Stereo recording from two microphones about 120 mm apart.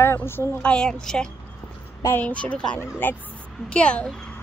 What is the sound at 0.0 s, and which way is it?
Speech, 20° left (ahead or behind).